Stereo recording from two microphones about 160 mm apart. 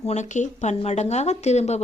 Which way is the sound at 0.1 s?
50° left (ahead or behind).